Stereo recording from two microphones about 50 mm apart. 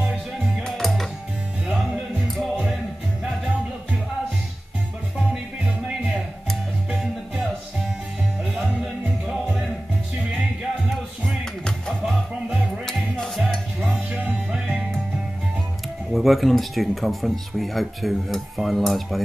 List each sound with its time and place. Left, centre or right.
0.7 s music: centre
9.3 s music: centre
13.0 s music: centre
14.5 s music: right
16.1 s speech: centre